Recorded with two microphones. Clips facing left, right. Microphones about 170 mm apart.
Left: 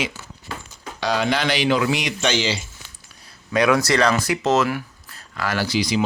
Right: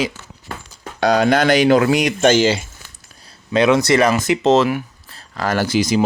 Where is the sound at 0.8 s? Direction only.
50° right (ahead or behind).